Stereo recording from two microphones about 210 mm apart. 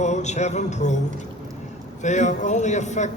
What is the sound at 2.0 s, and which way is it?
A man's voice, 35° left (ahead or behind).